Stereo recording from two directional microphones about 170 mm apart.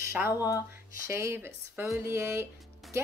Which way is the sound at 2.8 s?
Centre (ahead or behind).